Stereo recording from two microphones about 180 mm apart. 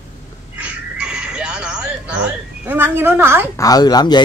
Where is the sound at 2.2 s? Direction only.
10° right (ahead or behind).